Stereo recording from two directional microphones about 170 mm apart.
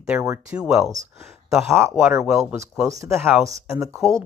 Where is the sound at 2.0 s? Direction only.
10° right (ahead or behind).